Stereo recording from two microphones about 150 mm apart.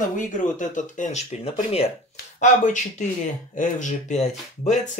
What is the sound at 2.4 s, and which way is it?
Speech, 55° left (ahead or behind).